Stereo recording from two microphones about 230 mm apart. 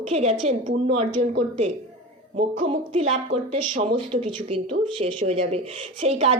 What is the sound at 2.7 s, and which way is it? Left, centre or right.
A woman's voice, right.